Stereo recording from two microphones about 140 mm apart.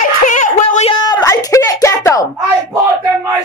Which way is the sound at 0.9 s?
25° left (ahead or behind).